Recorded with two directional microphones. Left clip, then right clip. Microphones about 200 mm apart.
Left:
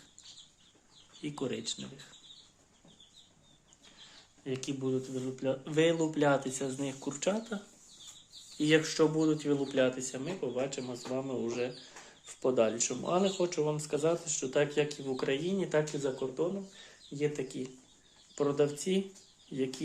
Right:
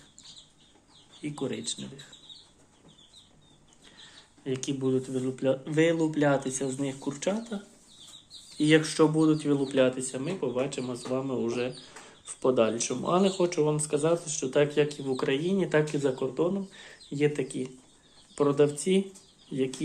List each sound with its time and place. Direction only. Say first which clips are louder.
1.2 s speech: right 3 dB; 20° left (ahead or behind)
4.4 s speech: right 5 dB; 5° left (ahead or behind)
5.6 s speech: right 1 dB; 10° left (ahead or behind)
8.5 s speech: right 4 dB; 5° left (ahead or behind)